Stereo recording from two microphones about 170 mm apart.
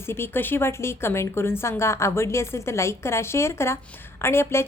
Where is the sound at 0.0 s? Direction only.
15° left (ahead or behind).